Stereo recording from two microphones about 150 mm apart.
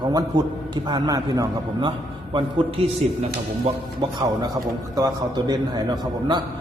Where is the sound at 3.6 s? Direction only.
30° right (ahead or behind).